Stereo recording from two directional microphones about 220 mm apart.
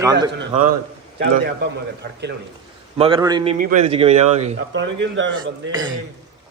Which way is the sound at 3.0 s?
20° right (ahead or behind).